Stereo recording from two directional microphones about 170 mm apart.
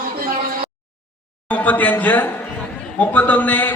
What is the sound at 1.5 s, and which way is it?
A man's voice, 10° left (ahead or behind).